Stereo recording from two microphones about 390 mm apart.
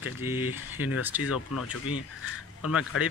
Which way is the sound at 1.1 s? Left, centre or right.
Centre.